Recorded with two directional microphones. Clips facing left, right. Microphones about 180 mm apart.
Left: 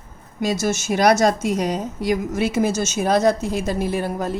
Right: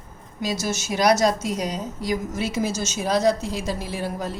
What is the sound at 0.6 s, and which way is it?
A woman's voice, 50° left (ahead or behind).